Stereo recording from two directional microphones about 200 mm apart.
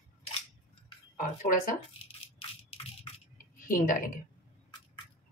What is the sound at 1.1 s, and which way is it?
Speech, 40° left (ahead or behind).